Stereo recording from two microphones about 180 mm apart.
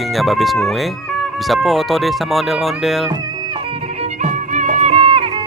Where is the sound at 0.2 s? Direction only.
Centre (ahead or behind).